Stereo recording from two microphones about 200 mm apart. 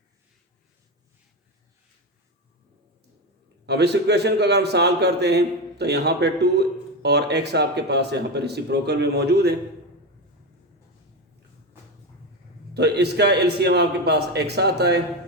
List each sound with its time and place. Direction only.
3.7 s a man's voice: 55° right (ahead or behind)
12.7 s a man's voice: 55° right (ahead or behind)